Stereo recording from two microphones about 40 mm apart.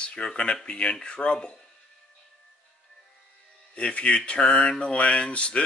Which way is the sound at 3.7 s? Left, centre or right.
Left.